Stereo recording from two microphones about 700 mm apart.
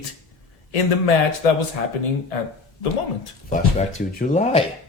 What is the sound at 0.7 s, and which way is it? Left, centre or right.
Speech, left.